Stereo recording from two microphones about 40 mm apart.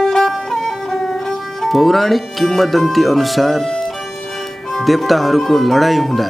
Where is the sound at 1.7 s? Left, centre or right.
Centre.